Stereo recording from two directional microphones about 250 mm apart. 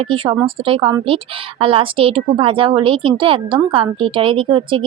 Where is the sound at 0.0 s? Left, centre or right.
Right.